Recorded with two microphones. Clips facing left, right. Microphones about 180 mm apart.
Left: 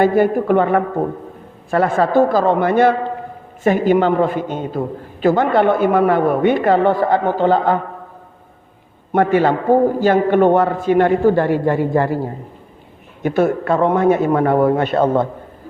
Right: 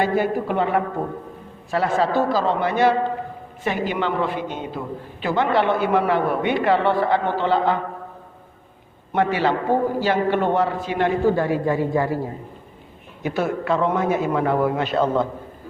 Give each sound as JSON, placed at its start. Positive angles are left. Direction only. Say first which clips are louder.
{"t": 0.0, "sound": "speech", "louder": "left 7 dB", "side_deg": 50}
{"t": 9.1, "sound": "speech", "louder": "left 6 dB", "side_deg": 50}
{"t": 13.2, "sound": "speech", "louder": "left 6 dB", "side_deg": 50}